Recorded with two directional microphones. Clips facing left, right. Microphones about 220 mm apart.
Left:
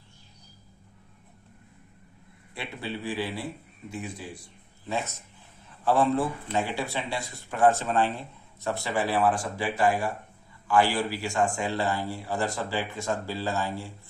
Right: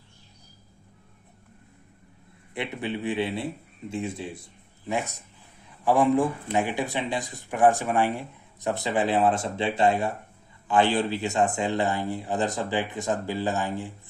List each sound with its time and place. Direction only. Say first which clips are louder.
2.6 s speech: right 5 dB; 20° right (ahead or behind)